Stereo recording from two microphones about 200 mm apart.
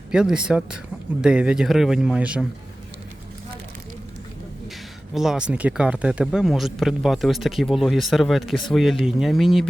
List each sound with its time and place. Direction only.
0.1 s speech: 5° right (ahead or behind)
5.1 s speech: centre (ahead or behind)